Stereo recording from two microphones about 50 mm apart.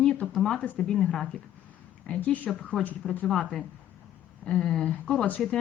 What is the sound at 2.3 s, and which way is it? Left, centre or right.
Speech, left.